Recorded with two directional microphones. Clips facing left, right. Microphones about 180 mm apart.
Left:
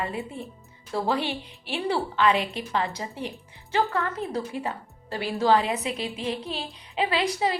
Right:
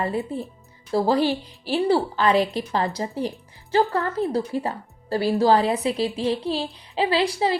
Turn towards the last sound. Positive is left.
turn(degrees=-30)  # may be behind; listen again after turning